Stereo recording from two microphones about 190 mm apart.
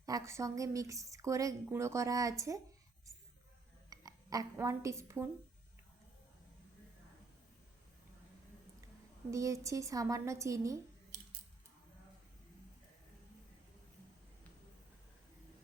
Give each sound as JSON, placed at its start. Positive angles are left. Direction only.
{"t": 0.0, "sound": "a woman's voice", "side_deg": -15}
{"t": 3.8, "sound": "speech", "side_deg": -20}
{"t": 9.3, "sound": "a woman's voice", "side_deg": -15}